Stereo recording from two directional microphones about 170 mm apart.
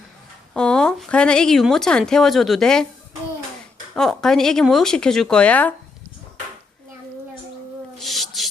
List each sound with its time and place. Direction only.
0.5 s speech: 5° left (ahead or behind)
3.9 s speech: 5° left (ahead or behind)
7.9 s owl: centre (ahead or behind)